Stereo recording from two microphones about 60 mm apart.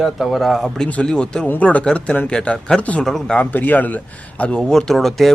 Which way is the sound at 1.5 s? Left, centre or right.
Left.